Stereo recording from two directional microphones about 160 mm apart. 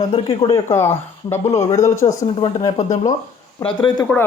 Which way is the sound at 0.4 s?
15° left (ahead or behind).